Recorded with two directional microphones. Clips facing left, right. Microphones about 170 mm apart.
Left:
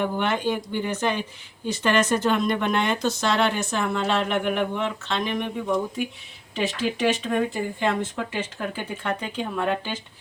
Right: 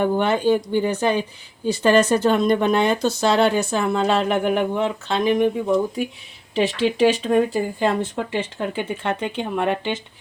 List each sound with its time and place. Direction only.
0.0 s speech: 35° right (ahead or behind)
6.5 s speech: 30° right (ahead or behind)